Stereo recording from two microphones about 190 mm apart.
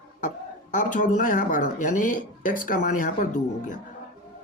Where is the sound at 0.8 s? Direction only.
45° left (ahead or behind).